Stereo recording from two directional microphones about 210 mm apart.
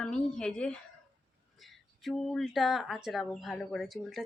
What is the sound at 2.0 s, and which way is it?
Speech, centre (ahead or behind).